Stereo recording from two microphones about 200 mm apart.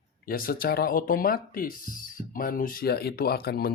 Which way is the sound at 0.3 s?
50° left (ahead or behind).